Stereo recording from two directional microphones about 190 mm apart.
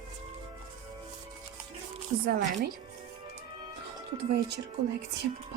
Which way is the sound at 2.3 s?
50° right (ahead or behind).